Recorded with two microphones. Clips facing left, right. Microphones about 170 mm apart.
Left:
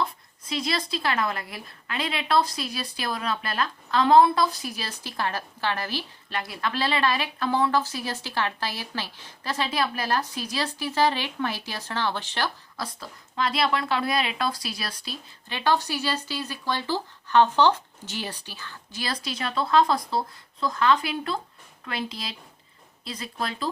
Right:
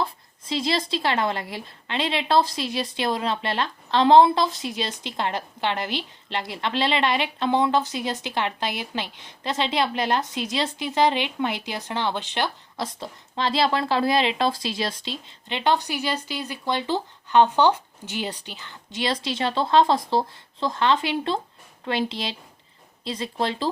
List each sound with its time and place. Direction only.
0.0 s speech: 25° right (ahead or behind)